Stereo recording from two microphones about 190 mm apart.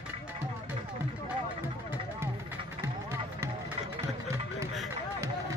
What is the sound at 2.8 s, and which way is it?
Music, 15° right (ahead or behind).